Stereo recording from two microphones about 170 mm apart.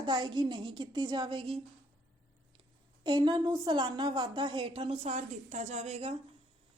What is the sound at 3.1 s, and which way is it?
A woman's voice, 25° right (ahead or behind).